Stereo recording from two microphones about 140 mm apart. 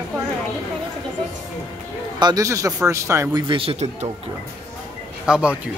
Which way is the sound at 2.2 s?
25° right (ahead or behind).